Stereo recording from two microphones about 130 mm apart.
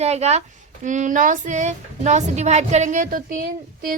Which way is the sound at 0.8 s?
75° right (ahead or behind).